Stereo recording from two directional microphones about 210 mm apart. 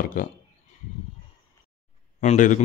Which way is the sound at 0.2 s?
45° left (ahead or behind).